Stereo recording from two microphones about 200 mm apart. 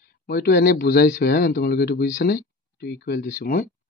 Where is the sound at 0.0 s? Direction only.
55° left (ahead or behind).